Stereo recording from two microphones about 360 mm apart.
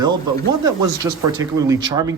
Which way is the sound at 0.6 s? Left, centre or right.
Centre.